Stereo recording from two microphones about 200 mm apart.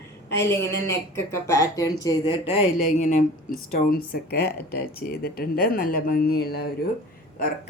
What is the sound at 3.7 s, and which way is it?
Speech, 45° left (ahead or behind).